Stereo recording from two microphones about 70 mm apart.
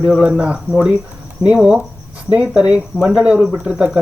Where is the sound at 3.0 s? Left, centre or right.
Centre.